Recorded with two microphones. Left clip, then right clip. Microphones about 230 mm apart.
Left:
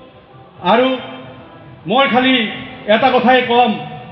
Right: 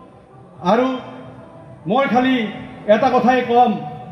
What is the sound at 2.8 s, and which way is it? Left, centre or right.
Speech, right.